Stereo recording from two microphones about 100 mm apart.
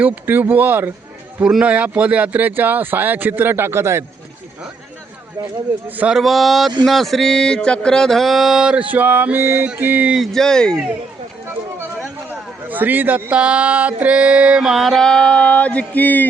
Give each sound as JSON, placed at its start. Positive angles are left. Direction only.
{"t": 0.0, "sound": "speech", "side_deg": -20}
{"t": 5.9, "sound": "speech", "side_deg": -15}
{"t": 6.1, "sound": "mantra", "side_deg": 0}
{"t": 10.2, "sound": "mantra", "side_deg": 5}
{"t": 12.6, "sound": "speech", "side_deg": -15}